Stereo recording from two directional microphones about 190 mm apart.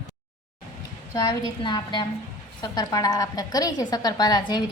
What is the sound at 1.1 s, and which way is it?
A woman's voice, 20° left (ahead or behind).